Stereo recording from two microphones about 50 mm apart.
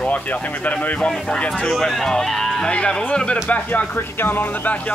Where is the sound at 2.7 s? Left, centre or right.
Left.